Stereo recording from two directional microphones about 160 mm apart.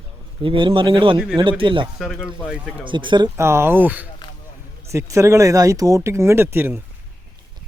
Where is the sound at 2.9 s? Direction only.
30° right (ahead or behind).